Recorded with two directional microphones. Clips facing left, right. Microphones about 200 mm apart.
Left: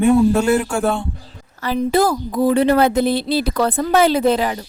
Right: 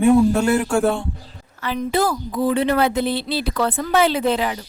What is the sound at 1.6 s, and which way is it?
Speech, 40° left (ahead or behind).